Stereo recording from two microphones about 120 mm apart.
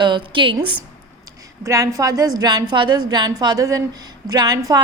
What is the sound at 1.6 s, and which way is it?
A woman's voice, 25° right (ahead or behind).